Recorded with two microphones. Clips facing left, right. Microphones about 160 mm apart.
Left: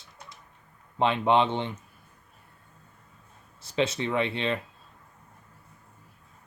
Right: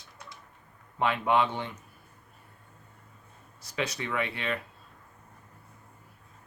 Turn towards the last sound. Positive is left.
turn(degrees=25)  # may be behind; listen again after turning